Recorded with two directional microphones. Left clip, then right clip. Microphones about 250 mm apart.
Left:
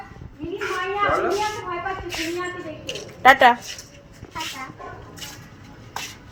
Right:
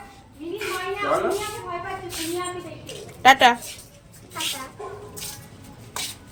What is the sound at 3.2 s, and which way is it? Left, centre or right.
Speech, centre.